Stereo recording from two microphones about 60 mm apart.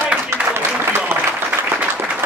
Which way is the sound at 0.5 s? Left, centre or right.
Right.